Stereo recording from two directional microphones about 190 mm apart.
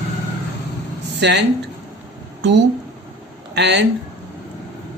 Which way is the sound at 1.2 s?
65° right (ahead or behind).